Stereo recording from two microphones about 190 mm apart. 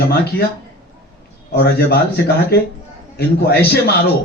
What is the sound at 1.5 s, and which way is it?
Speech, 60° left (ahead or behind).